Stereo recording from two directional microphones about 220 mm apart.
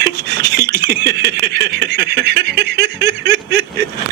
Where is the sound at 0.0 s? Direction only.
50° right (ahead or behind).